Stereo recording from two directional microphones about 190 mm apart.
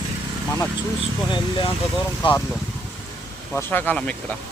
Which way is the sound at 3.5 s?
10° left (ahead or behind).